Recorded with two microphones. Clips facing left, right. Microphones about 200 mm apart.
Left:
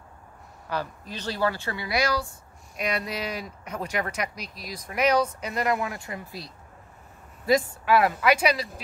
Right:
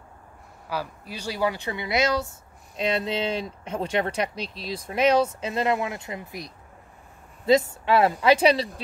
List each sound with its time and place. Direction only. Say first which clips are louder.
0.7 s speech: even; 10° right (ahead or behind); by 8.6 s 30° right (ahead or behind)